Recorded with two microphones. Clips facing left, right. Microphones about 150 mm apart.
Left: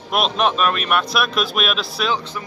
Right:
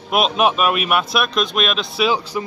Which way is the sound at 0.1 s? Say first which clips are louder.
Right 2 dB; 5° right (ahead or behind).